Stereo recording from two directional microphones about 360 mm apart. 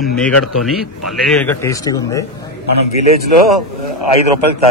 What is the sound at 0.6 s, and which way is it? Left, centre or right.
A man's voice, centre.